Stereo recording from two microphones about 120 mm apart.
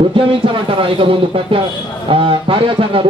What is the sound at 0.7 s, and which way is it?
A man's voice, 45° right (ahead or behind).